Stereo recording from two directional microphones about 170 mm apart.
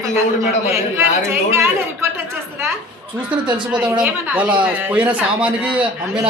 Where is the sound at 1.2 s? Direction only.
15° right (ahead or behind).